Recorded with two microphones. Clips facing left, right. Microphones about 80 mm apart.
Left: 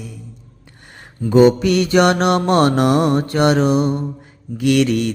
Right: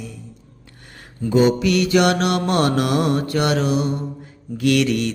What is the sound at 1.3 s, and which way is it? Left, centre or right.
Mantra, left.